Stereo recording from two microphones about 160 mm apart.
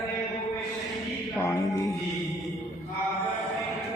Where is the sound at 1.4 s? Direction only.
20° left (ahead or behind).